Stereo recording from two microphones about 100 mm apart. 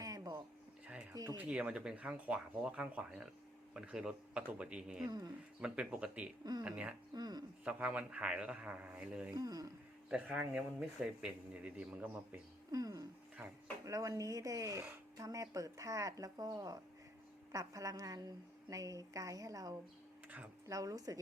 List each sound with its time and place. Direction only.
0.0 s a sound: 35° right (ahead or behind)
1.1 s speech: 40° right (ahead or behind)
1.4 s speech: 10° right (ahead or behind)
5.0 s speech: 45° right (ahead or behind)
5.5 s speech: 10° right (ahead or behind)
6.4 s speech: 40° right (ahead or behind)
6.7 s speech: 15° right (ahead or behind)
7.1 s speech: 45° right (ahead or behind)
7.6 s speech: 15° right (ahead or behind)
9.3 s speech: 40° right (ahead or behind)
10.1 s speech: 10° right (ahead or behind)
12.7 s speech: 40° right (ahead or behind)
20.2 s speech: 15° right (ahead or behind)
20.7 s speech: 35° right (ahead or behind)